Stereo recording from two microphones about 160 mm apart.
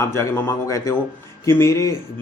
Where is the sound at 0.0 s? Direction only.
15° left (ahead or behind).